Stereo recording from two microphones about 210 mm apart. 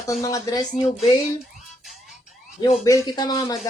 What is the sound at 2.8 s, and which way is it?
Speech, 15° left (ahead or behind).